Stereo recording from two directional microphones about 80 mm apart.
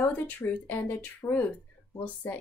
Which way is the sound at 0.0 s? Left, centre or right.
Left.